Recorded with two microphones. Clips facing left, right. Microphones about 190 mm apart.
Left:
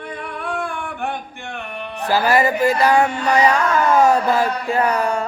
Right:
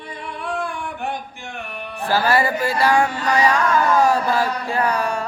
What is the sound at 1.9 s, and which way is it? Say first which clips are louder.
Music: left 2 dB; 15° left (ahead or behind).